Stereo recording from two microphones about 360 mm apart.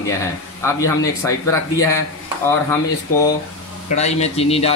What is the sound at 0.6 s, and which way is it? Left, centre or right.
Speech, centre.